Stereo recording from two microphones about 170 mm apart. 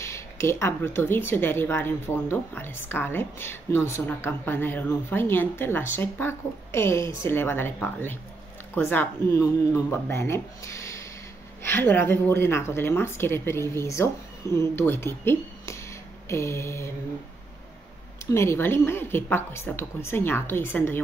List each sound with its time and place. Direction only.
0.0 s speech: 15° left (ahead or behind)
18.2 s speech: 15° left (ahead or behind)